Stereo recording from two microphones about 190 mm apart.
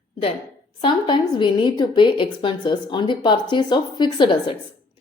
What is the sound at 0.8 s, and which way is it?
A woman's voice, 25° left (ahead or behind).